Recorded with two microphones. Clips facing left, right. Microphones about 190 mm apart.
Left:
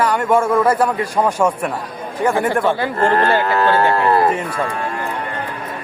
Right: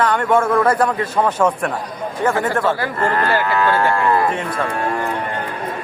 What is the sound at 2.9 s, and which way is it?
Speech, 25° left (ahead or behind).